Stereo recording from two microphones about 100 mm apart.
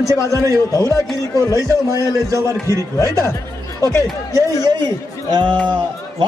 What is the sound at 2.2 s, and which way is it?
A man's voice, 30° right (ahead or behind).